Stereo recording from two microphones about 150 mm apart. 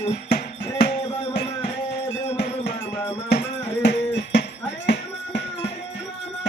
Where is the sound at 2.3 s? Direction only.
90° left.